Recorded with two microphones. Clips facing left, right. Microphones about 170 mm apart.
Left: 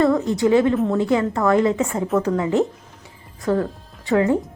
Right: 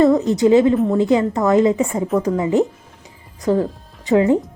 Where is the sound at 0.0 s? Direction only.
20° right (ahead or behind).